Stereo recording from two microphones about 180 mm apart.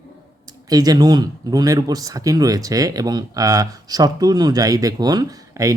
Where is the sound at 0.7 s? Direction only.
20° right (ahead or behind).